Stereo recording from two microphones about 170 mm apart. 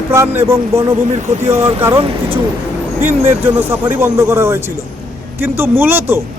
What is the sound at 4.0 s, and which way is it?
Speech, 15° right (ahead or behind).